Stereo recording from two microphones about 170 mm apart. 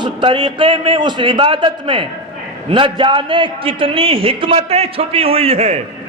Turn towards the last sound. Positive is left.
turn(degrees=-35)  # may be behind; listen again after turning